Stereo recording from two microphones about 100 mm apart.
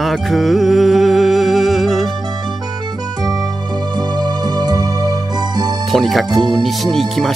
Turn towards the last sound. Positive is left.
turn(degrees=0)  # may be behind; listen again after turning